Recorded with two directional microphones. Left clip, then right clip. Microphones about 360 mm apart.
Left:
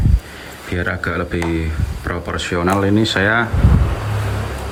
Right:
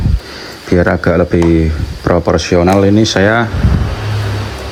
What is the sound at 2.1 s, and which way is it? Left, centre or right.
Speech, centre.